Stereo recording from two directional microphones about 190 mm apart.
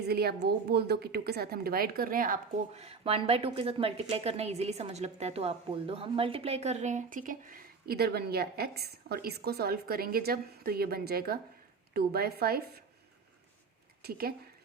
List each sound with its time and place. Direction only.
0.1 s a woman's voice: 55° right (ahead or behind)
2.8 s a woman's voice: 30° right (ahead or behind); by 12.6 s 55° right (ahead or behind)
14.0 s speech: 55° right (ahead or behind)